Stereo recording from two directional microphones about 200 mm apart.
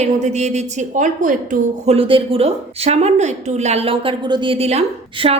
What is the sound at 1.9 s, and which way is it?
A woman's voice, 25° right (ahead or behind).